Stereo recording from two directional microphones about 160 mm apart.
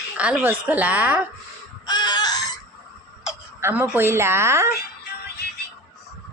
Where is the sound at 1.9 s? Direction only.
25° left (ahead or behind).